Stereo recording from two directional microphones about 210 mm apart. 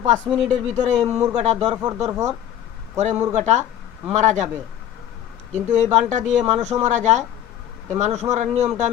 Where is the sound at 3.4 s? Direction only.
35° right (ahead or behind).